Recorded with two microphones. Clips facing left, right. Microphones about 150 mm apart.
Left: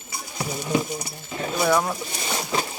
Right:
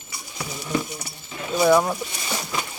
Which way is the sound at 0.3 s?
35° left (ahead or behind).